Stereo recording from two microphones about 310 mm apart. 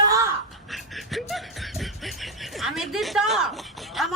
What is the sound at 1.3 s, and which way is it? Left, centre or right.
Speech, centre.